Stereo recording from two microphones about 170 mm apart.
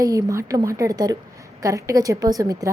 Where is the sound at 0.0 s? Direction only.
20° right (ahead or behind).